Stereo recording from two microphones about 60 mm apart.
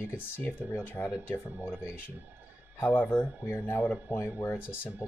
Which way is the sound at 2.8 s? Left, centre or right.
Left.